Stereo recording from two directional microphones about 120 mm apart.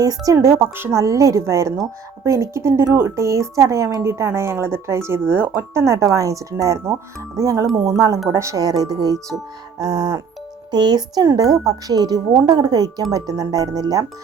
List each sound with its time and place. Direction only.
0.3 s a woman's voice: 20° right (ahead or behind)